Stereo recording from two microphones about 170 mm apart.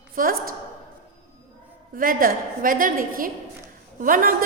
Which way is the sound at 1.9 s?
55° right (ahead or behind).